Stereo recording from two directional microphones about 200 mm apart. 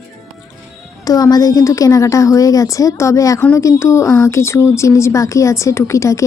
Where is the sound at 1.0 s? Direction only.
20° left (ahead or behind).